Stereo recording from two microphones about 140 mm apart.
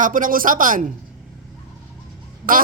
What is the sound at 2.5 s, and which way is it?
Speech, 80° right.